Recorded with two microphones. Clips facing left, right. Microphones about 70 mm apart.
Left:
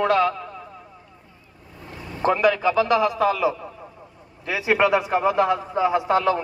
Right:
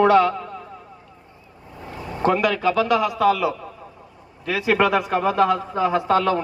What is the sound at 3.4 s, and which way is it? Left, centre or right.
Radio, centre.